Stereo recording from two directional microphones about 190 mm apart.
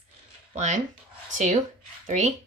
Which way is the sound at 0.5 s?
40° right (ahead or behind).